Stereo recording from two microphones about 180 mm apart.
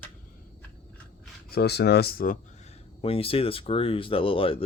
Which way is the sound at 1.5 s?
60° left (ahead or behind).